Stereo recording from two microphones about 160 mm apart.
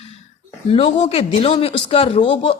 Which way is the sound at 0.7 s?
35° left (ahead or behind).